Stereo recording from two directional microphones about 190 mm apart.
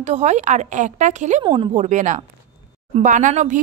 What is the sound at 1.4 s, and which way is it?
Speech, 25° right (ahead or behind).